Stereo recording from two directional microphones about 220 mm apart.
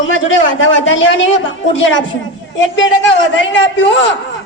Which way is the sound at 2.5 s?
55° left (ahead or behind).